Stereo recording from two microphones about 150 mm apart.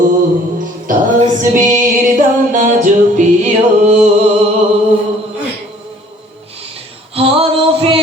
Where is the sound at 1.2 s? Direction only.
55° right (ahead or behind).